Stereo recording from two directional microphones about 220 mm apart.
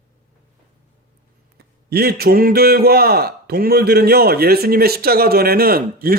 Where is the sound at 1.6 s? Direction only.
45° right (ahead or behind).